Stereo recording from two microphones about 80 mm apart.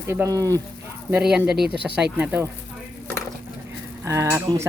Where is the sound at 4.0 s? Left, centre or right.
Right.